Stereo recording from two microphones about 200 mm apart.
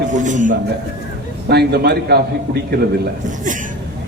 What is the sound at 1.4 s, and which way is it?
Speech, 55° right (ahead or behind).